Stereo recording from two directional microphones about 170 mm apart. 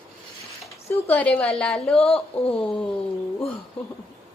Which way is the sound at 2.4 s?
35° left (ahead or behind).